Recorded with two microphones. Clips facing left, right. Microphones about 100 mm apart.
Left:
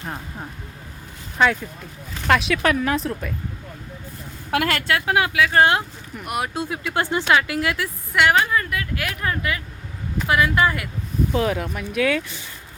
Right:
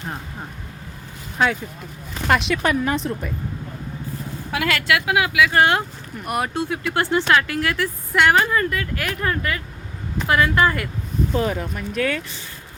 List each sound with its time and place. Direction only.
2.2 s speech: centre (ahead or behind)
4.7 s speech: 35° left (ahead or behind)
6.1 s speech: 5° left (ahead or behind)
6.5 s speech: 15° left (ahead or behind)
8.1 s speech: centre (ahead or behind)